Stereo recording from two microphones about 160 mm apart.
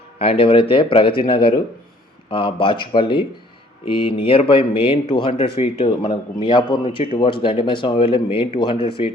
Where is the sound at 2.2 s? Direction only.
35° left (ahead or behind).